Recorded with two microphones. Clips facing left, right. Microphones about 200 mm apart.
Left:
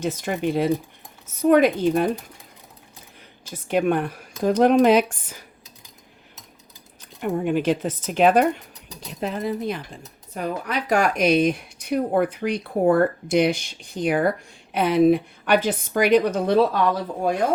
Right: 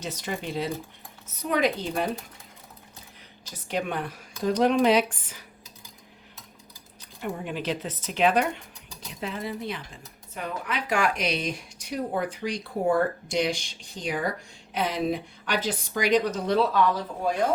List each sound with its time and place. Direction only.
0.0 s speech: 50° left (ahead or behind)
3.7 s speech: 50° left (ahead or behind)
7.2 s speech: 50° left (ahead or behind)